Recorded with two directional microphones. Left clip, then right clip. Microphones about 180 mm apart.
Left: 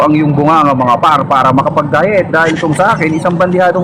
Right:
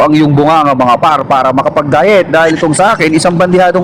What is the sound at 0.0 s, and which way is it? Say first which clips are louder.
A man's voice: right 2 dB; 25° right (ahead or behind).